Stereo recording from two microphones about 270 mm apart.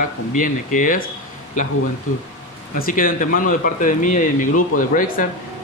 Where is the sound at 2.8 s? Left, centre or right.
Left.